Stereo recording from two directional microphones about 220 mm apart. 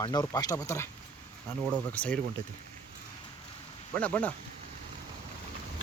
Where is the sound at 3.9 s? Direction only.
5° left (ahead or behind).